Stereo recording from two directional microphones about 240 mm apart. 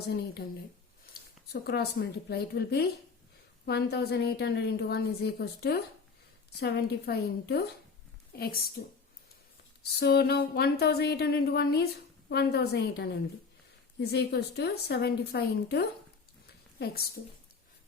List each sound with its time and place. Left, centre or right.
1.6 s a woman's voice: left
9.8 s a woman's voice: left